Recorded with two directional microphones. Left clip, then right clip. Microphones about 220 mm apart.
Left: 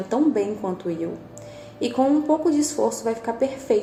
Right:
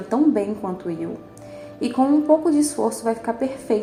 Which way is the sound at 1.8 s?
25° right (ahead or behind).